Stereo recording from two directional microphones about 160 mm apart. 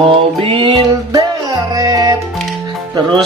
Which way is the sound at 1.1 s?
20° right (ahead or behind).